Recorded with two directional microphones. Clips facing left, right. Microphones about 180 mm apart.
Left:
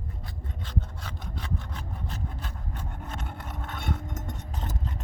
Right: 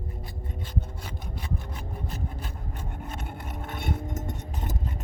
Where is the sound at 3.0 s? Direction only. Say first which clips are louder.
Right 1 dB; 10° right (ahead or behind).